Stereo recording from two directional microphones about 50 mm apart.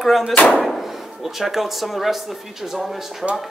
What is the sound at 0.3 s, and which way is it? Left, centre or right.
Speech, left.